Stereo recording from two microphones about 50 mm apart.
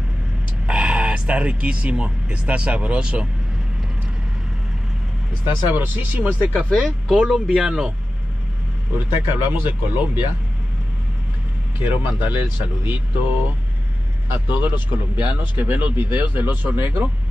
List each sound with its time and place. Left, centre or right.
0.7 s speech: centre
5.7 s a man's voice: right
6.8 s speech: centre
8.9 s speech: right
11.8 s a man's voice: right
14.3 s a man's voice: right